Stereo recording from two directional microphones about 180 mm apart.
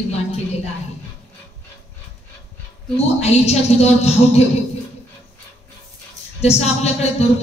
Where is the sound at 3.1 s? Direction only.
35° left (ahead or behind).